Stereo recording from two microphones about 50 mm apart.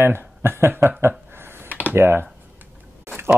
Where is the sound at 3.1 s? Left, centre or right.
Right.